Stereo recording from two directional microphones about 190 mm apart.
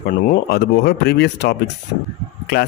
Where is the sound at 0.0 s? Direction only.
55° left (ahead or behind).